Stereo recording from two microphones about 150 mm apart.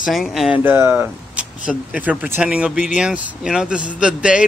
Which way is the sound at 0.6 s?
15° right (ahead or behind).